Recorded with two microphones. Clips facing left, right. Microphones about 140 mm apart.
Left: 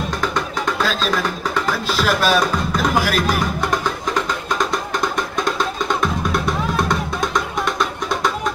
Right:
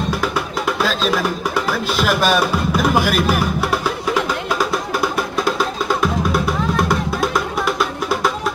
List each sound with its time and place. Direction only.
0.2 s music: 5° right (ahead or behind)